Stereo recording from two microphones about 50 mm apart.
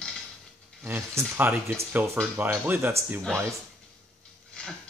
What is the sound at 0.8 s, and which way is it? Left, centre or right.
Speech, right.